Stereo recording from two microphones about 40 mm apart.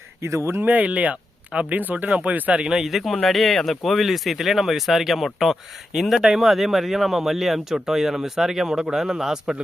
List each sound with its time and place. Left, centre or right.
0.6 s speech: right
2.6 s speech: centre